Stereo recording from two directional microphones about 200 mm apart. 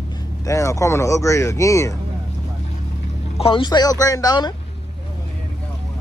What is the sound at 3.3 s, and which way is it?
Speech, 25° left (ahead or behind).